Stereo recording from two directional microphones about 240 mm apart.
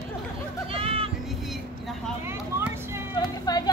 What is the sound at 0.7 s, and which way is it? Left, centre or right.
Music, right.